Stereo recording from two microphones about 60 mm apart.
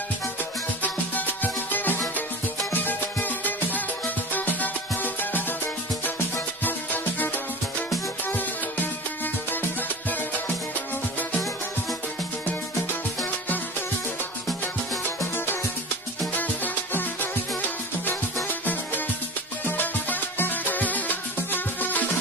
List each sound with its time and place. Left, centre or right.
0.4 s music: left
6.6 s music: left
9.2 s music: left
15.3 s music: left
16.3 s music: left